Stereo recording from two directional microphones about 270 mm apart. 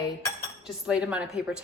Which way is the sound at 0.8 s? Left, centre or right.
Centre.